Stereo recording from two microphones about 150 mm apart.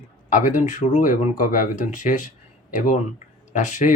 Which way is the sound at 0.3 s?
55° left (ahead or behind).